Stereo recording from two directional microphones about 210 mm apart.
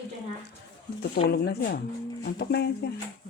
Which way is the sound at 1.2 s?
50° left (ahead or behind).